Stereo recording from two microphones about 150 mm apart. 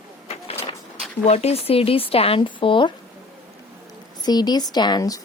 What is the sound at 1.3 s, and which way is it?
Speech, 45° left (ahead or behind).